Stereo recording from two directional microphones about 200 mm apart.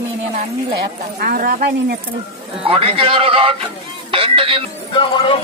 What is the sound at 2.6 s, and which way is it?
Speech, 30° right (ahead or behind).